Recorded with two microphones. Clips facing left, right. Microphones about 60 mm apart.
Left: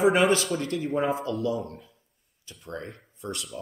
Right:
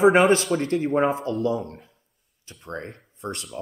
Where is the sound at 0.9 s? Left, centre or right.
Right.